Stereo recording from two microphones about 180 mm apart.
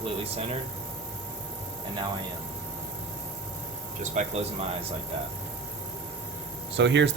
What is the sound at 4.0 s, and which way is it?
Speech, 40° right (ahead or behind).